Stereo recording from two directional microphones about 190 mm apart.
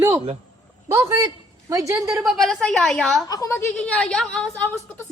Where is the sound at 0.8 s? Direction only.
15° right (ahead or behind).